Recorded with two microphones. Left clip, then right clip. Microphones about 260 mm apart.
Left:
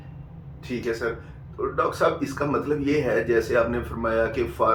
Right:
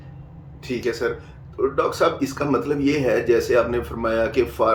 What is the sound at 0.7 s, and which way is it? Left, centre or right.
Speech, right.